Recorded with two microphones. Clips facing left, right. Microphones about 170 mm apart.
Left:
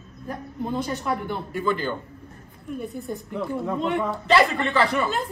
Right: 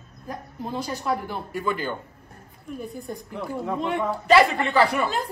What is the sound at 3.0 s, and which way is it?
A woman's voice, centre (ahead or behind).